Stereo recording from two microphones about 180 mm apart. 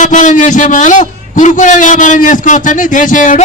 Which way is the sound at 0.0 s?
45° left (ahead or behind).